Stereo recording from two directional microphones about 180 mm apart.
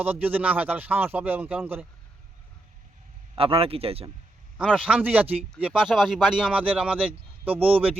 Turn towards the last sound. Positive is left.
turn(degrees=-30)  # may be behind; listen again after turning